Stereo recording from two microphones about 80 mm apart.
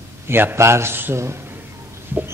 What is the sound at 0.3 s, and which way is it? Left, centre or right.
A man's voice, right.